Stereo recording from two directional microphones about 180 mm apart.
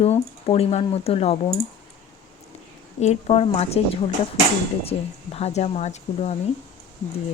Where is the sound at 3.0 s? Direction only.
35° left (ahead or behind).